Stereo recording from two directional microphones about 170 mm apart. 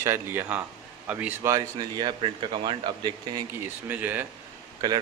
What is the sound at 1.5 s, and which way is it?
A man's voice, 25° right (ahead or behind).